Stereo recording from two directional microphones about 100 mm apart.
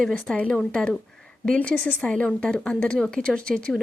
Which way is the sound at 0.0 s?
5° left (ahead or behind).